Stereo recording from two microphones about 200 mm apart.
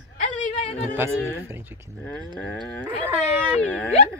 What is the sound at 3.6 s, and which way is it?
Speech, 5° left (ahead or behind).